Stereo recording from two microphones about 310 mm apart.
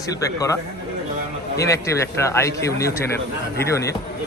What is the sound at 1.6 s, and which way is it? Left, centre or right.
Speech, centre.